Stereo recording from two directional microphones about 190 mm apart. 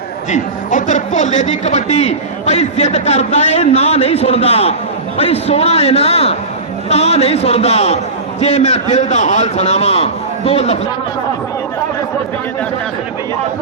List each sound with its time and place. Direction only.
0.3 s a man's voice: 40° left (ahead or behind)